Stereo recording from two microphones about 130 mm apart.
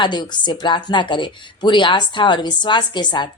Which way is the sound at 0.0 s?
35° left (ahead or behind).